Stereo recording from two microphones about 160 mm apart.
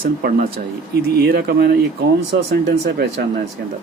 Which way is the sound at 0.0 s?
65° right (ahead or behind).